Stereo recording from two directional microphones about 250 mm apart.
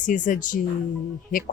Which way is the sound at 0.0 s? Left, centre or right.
Left.